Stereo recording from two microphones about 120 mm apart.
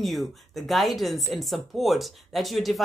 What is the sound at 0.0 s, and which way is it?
Speech, centre (ahead or behind).